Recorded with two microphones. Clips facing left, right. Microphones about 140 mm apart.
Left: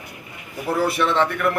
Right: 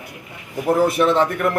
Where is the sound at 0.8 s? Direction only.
45° right (ahead or behind).